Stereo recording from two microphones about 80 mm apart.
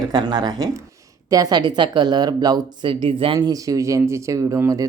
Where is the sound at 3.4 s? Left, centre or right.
Right.